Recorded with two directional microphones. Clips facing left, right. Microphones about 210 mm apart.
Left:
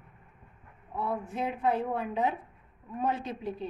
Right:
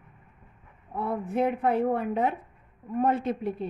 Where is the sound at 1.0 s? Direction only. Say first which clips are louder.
Right 6 dB; 55° right (ahead or behind).